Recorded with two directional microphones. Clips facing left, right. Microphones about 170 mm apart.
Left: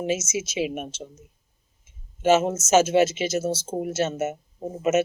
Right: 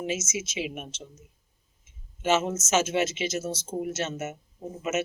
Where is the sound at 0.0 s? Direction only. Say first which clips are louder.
Left 5 dB; 35° left (ahead or behind).